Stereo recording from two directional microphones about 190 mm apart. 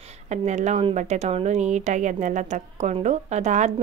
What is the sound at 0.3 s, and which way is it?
Speech, 40° right (ahead or behind).